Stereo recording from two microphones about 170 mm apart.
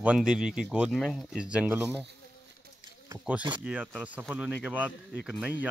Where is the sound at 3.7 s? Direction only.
5° right (ahead or behind).